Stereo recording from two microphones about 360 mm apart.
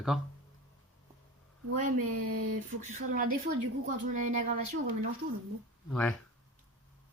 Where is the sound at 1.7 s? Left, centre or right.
Right.